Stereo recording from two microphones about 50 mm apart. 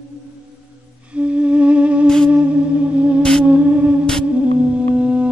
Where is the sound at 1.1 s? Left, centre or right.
Right.